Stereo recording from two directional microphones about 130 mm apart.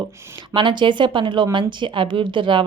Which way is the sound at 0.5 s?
40° right (ahead or behind).